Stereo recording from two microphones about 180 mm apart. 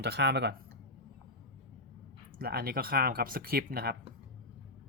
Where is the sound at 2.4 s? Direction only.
60° right (ahead or behind).